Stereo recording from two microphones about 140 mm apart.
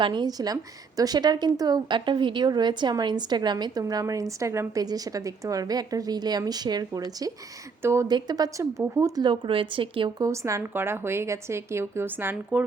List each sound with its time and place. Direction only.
0.0 s a woman's voice: 30° right (ahead or behind)
7.8 s a woman's voice: 20° right (ahead or behind); by 10.1 s 40° right (ahead or behind)
10.2 s a woman's voice: 20° right (ahead or behind)